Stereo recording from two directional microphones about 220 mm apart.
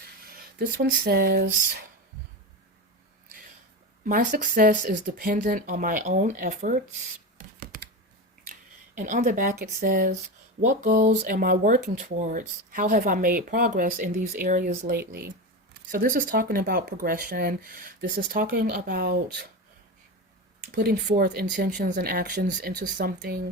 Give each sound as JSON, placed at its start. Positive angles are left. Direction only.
{"t": 0.6, "sound": "speech", "side_deg": -45}
{"t": 4.0, "sound": "speech", "side_deg": -35}
{"t": 7.3, "sound": "hands", "side_deg": -40}
{"t": 9.0, "sound": "speech", "side_deg": -35}
{"t": 20.7, "sound": "speech", "side_deg": -45}